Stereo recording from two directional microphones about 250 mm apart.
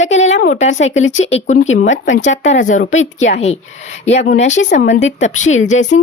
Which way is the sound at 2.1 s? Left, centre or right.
Left.